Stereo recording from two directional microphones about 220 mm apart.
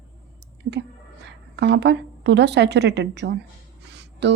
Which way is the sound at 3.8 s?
50° right (ahead or behind).